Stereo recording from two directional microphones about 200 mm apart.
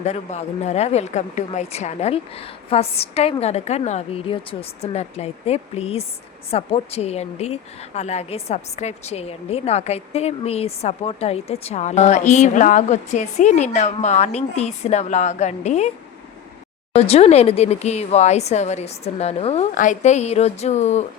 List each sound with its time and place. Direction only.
0.0 s a woman's voice: 35° left (ahead or behind)
16.9 s a woman's voice: 30° left (ahead or behind)